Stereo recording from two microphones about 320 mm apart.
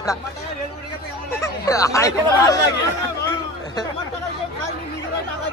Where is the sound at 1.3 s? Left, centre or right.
Centre.